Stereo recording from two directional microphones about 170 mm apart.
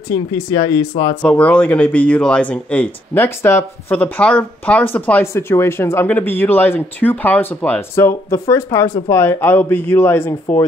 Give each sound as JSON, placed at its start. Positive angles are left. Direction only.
{"t": 0.1, "sound": "speech", "side_deg": 20}
{"t": 1.2, "sound": "speech", "side_deg": 5}